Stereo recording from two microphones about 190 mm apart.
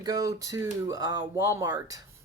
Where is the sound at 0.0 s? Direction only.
20° right (ahead or behind).